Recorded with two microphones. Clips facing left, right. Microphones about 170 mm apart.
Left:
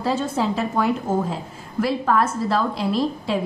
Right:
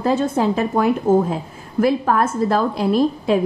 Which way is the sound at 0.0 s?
55° right (ahead or behind).